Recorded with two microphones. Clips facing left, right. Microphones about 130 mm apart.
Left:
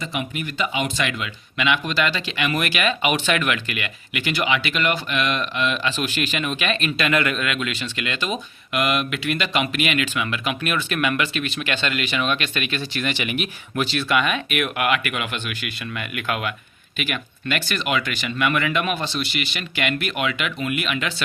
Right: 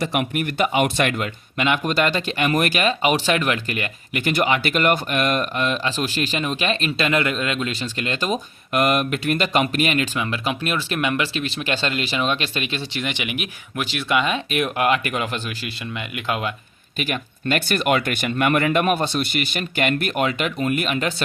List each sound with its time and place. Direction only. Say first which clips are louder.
0.0 s speech: right 5 dB; 65° right (ahead or behind); by 15.7 s 35° right (ahead or behind)
15.9 s speech: right 1 dB; 20° right (ahead or behind)
17.0 s speech: right 2 dB; 40° right (ahead or behind)